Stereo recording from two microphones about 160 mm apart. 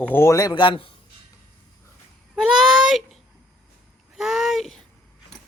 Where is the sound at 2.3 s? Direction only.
Centre (ahead or behind).